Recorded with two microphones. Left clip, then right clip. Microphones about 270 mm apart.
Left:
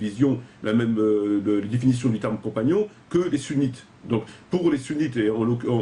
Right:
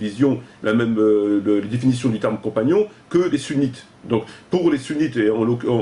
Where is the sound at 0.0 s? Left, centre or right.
Centre.